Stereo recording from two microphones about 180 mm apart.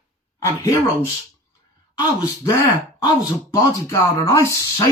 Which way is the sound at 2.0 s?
20° left (ahead or behind).